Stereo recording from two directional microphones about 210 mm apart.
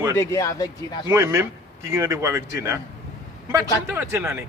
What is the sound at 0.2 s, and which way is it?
Speech, 15° left (ahead or behind).